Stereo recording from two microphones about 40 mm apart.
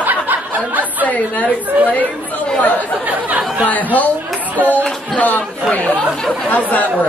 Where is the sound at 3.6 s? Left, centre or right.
Left.